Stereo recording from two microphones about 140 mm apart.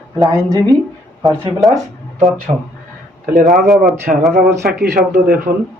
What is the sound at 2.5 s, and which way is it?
Speech, 50° right (ahead or behind).